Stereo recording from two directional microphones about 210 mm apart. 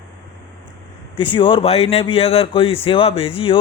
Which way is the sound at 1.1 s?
25° left (ahead or behind).